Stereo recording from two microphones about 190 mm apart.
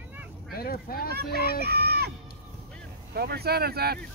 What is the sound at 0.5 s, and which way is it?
Speech, 50° left (ahead or behind).